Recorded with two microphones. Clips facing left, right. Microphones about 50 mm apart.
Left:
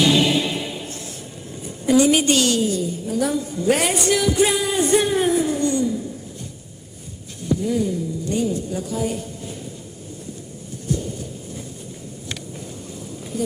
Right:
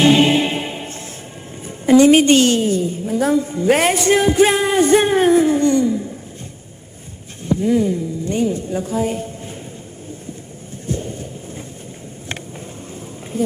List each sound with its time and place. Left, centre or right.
0.0 s music: right
1.6 s a woman's voice: right
7.4 s speech: right
10.8 s a sound: right
13.3 s speech: right